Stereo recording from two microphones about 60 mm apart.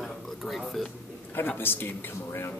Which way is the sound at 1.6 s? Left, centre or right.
Left.